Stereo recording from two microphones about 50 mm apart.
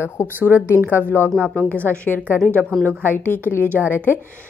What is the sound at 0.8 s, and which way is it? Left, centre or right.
A woman's voice, left.